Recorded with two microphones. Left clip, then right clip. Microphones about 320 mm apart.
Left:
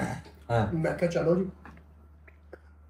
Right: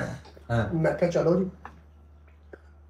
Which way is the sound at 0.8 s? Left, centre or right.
Centre.